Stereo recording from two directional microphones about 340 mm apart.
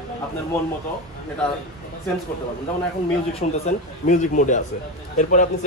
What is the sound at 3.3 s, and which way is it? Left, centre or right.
A man's voice, centre.